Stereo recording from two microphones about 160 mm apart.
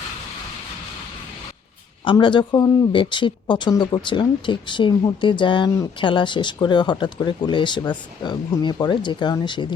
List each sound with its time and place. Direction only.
2.0 s speech: 30° left (ahead or behind)